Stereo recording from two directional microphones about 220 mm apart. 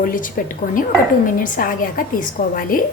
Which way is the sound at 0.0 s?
40° left (ahead or behind).